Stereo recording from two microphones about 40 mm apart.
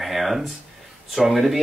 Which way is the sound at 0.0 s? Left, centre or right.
Centre.